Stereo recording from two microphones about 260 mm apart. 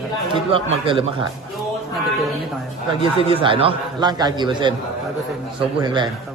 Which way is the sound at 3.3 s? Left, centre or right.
Centre.